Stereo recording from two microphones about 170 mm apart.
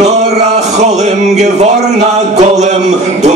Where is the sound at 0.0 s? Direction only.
40° right (ahead or behind).